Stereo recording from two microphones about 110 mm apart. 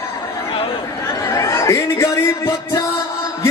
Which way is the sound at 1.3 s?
30° left (ahead or behind).